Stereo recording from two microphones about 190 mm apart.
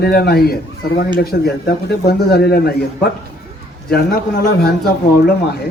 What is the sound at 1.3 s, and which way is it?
Speech, 65° left (ahead or behind).